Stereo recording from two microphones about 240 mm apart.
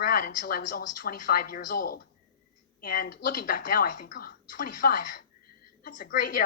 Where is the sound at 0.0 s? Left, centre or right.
Left.